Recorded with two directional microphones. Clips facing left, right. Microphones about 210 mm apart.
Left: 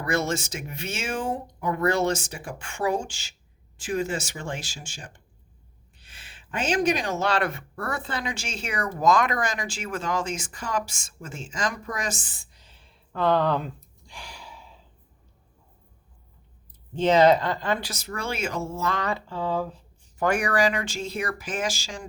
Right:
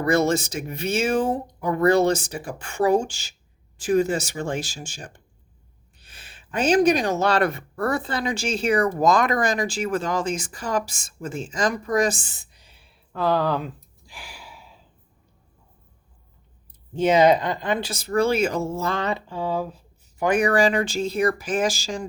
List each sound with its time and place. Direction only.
0.0 s speech: 35° right (ahead or behind); by 14.7 s 10° right (ahead or behind)
16.9 s speech: 10° right (ahead or behind); by 22.0 s 40° right (ahead or behind)